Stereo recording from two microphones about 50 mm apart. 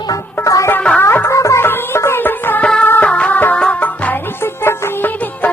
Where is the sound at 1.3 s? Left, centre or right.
Left.